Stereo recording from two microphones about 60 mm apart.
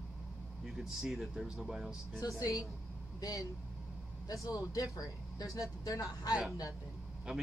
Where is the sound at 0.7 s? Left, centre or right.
Centre.